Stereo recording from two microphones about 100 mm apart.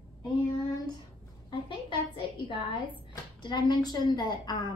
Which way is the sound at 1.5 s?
55° left (ahead or behind).